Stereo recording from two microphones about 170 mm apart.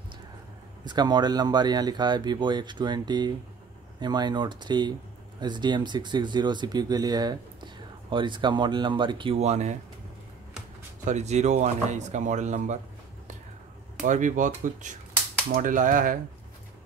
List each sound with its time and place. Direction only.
0.8 s speech: 25° right (ahead or behind); by 9.8 s 40° right (ahead or behind)
11.1 s speech: 40° right (ahead or behind)
14.0 s speech: 50° right (ahead or behind)